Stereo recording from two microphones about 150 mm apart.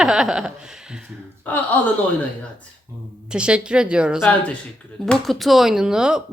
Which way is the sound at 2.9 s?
20° right (ahead or behind).